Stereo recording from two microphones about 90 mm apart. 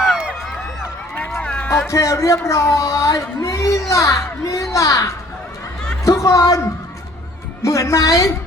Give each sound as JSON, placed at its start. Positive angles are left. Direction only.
{"t": 0.0, "sound": "run", "side_deg": -10}
{"t": 1.4, "sound": "a sound", "side_deg": 10}
{"t": 1.9, "sound": "speech", "side_deg": 35}